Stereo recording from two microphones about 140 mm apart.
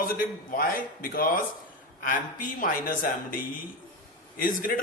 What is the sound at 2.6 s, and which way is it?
A man's voice, 90° left.